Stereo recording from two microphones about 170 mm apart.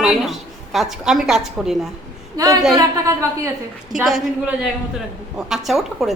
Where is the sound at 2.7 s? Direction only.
20° right (ahead or behind).